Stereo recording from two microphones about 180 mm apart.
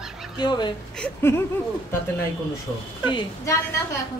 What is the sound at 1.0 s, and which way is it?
Speech, 15° left (ahead or behind).